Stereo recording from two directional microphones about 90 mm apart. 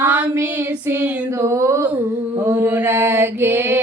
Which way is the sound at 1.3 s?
30° right (ahead or behind).